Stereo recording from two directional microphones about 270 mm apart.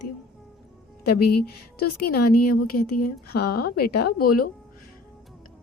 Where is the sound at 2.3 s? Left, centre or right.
Left.